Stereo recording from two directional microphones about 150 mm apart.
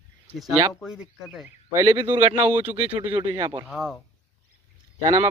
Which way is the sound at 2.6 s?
40° right (ahead or behind).